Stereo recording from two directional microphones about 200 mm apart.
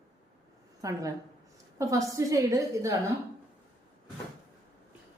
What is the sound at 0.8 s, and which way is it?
A woman's voice, 15° right (ahead or behind).